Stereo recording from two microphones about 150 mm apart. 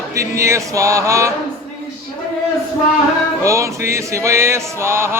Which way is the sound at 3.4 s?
20° right (ahead or behind).